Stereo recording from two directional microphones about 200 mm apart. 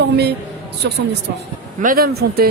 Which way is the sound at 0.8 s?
55° right (ahead or behind).